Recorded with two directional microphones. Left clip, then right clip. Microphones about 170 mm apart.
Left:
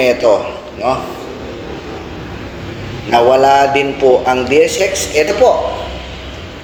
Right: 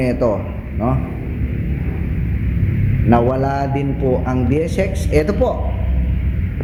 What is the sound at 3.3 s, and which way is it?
A man's voice, centre (ahead or behind).